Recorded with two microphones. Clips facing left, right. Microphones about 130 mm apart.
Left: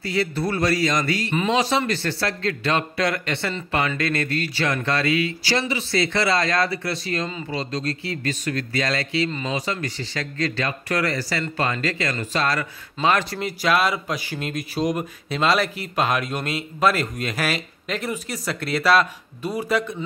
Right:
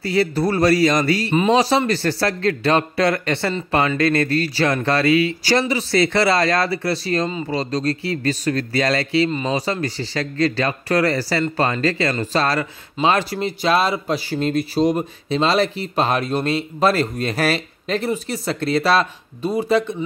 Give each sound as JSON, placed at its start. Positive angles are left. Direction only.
{"t": 0.0, "sound": "speech", "side_deg": -35}
{"t": 5.4, "sound": "speech", "side_deg": -45}